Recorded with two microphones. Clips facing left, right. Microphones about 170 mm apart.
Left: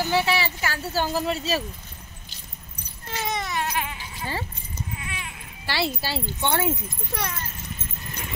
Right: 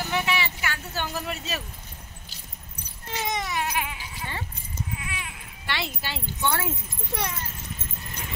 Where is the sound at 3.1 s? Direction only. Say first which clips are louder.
Left 1 dB; 15° right (ahead or behind).